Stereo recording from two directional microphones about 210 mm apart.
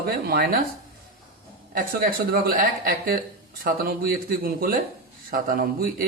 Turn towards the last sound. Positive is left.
turn(degrees=-40)  # may be behind; listen again after turning